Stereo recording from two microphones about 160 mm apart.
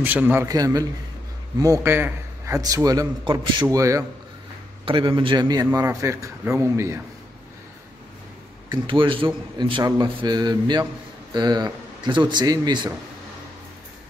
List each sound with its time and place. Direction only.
0.0 s a man's voice: 10° right (ahead or behind)
0.5 s a man's voice: 20° right (ahead or behind)
4.8 s a man's voice: 30° right (ahead or behind)
8.6 s a man's voice: 30° right (ahead or behind)